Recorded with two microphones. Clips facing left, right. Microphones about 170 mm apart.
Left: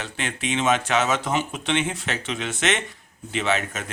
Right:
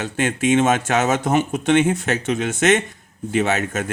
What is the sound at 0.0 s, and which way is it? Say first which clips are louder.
Speech: right 9 dB; 45° right (ahead or behind).